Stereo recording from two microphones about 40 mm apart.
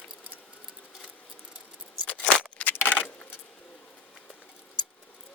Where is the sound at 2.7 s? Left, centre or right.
Left.